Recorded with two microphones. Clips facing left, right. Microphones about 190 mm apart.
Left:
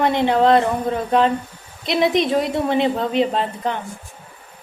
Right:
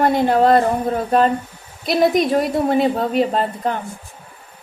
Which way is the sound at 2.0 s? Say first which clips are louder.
Right 2 dB; 5° right (ahead or behind).